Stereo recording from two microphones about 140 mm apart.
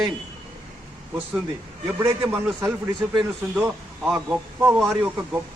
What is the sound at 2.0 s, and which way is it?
A man's voice, 20° right (ahead or behind).